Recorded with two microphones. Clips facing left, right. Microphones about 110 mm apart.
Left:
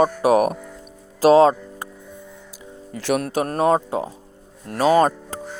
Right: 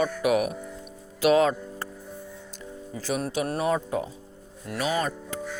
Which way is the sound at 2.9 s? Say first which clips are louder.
Left 7 dB; 70° left (ahead or behind).